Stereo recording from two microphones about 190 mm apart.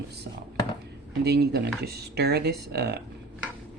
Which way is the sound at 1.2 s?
55° right (ahead or behind).